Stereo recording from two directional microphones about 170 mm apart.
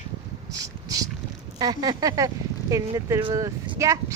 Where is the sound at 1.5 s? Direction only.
25° right (ahead or behind).